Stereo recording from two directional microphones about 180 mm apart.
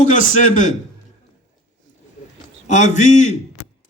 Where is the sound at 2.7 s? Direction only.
40° left (ahead or behind).